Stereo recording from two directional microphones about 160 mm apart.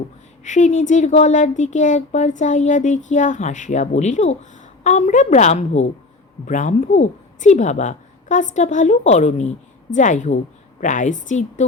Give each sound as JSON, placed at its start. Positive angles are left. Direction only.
{"t": 0.4, "sound": "a woman's voice", "side_deg": 50}